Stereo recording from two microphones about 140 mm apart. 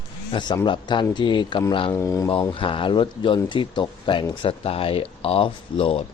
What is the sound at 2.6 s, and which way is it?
Speech, 35° left (ahead or behind).